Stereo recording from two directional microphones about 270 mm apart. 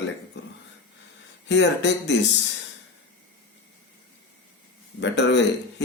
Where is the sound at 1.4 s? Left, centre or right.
Left.